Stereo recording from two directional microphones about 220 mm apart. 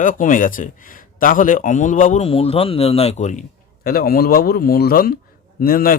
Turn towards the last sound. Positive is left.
turn(degrees=40)  # may be behind; listen again after turning